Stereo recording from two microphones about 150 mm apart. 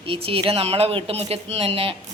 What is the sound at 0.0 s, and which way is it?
A woman's voice, 35° right (ahead or behind).